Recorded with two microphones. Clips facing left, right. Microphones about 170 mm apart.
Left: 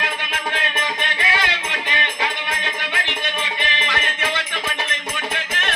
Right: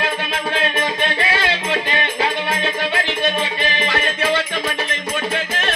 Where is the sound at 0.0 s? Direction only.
35° right (ahead or behind).